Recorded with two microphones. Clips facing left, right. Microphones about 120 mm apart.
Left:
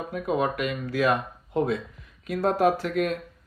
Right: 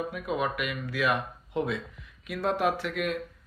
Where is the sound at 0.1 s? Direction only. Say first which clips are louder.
Left 4 dB; 35° left (ahead or behind).